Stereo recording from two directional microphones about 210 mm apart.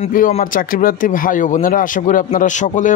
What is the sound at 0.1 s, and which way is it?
Speech, 40° left (ahead or behind).